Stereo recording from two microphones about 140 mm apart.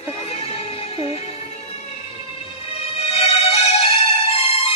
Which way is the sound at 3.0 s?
50° left (ahead or behind).